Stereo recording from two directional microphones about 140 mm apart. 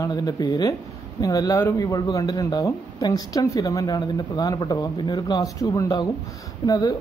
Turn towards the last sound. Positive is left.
turn(degrees=30)  # may be behind; listen again after turning